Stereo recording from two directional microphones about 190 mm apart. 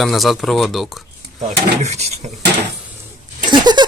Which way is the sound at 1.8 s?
35° right (ahead or behind).